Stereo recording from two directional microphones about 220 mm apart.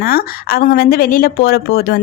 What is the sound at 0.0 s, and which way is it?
Speech, 45° left (ahead or behind).